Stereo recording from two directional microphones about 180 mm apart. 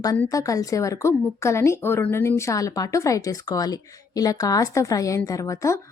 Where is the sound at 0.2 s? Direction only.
20° left (ahead or behind).